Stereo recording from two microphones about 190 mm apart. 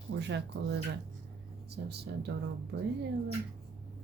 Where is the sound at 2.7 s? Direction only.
75° right (ahead or behind).